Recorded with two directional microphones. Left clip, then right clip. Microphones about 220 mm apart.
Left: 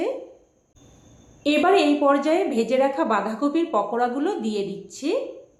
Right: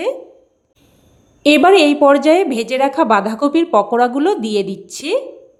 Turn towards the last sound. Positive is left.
turn(degrees=-50)  # may be behind; listen again after turning